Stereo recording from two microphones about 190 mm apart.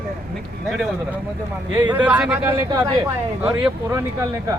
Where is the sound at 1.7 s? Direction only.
20° right (ahead or behind).